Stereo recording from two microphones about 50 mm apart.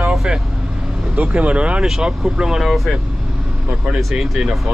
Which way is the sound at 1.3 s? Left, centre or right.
Right.